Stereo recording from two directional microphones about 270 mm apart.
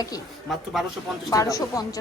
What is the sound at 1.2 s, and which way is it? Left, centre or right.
Speech, centre.